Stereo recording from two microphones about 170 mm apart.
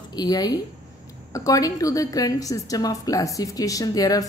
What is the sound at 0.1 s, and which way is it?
A woman's voice, 25° left (ahead or behind).